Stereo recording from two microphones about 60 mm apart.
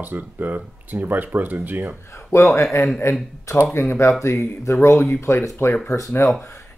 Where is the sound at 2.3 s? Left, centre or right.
Left.